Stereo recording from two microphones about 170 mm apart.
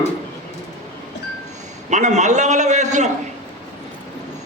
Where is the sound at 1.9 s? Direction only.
45° right (ahead or behind).